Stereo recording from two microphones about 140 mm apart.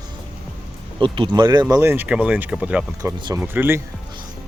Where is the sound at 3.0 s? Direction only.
25° right (ahead or behind).